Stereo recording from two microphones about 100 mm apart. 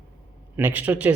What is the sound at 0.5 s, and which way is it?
Speech, 20° right (ahead or behind).